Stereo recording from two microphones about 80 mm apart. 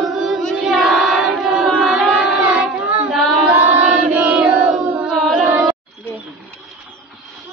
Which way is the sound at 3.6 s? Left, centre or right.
Centre.